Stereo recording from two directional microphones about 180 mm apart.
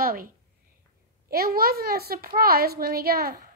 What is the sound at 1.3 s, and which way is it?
A woman's voice, 55° right (ahead or behind).